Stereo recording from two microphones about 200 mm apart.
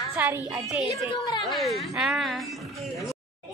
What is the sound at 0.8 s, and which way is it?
Speech, 20° left (ahead or behind).